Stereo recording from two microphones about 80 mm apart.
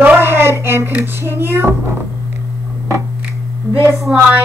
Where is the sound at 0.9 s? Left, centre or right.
Right.